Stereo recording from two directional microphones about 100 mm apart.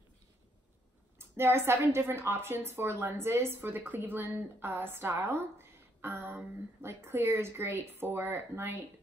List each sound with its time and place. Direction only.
1.1 s a woman's voice: 25° right (ahead or behind)